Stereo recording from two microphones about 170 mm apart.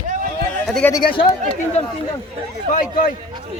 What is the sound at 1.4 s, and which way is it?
Speech, 40° left (ahead or behind).